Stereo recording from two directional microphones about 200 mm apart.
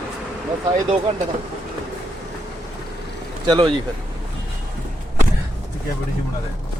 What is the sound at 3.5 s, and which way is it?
Speech, 25° right (ahead or behind).